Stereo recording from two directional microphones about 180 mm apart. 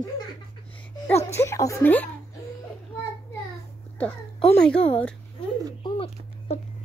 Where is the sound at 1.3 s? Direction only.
15° left (ahead or behind).